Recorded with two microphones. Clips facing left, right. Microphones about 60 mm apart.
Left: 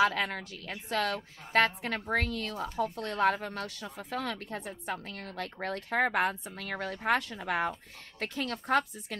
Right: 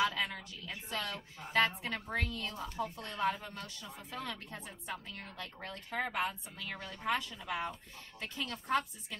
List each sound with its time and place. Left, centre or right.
0.0 s speech: left